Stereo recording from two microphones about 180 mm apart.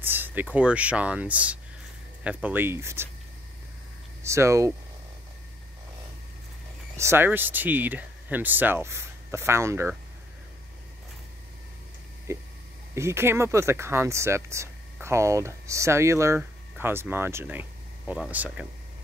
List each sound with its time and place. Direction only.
0.0 s speech: 10° right (ahead or behind)
4.2 s speech: 15° right (ahead or behind)
7.0 s speech: 15° right (ahead or behind)
12.3 s speech: 15° right (ahead or behind)